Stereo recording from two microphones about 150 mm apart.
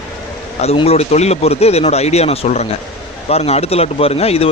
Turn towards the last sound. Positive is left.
turn(degrees=45)  # may be behind; listen again after turning